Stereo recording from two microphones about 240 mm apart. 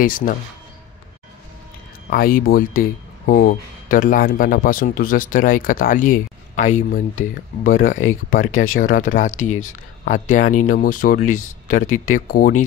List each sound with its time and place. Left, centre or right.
0.0 s speech: left
2.0 s speech: left
9.4 s speech: left
10.0 s speech: left
11.3 s speech: left
12.3 s speech: left